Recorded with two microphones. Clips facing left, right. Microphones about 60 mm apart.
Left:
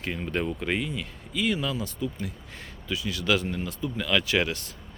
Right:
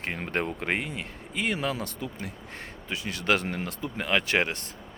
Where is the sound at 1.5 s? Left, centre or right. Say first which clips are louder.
Even; right.